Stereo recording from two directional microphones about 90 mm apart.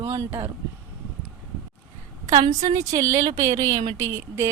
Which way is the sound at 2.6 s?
45° right (ahead or behind).